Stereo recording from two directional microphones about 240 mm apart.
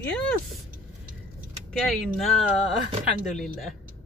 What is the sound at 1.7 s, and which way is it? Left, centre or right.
Speech, centre.